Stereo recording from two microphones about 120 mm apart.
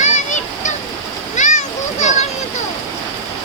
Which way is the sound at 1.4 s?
85° left.